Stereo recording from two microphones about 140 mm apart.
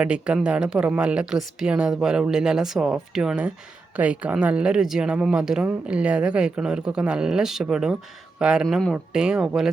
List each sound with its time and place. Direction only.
0.0 s speech: 5° right (ahead or behind)